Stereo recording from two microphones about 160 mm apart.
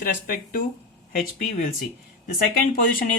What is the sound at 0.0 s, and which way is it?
Speech, 65° left (ahead or behind).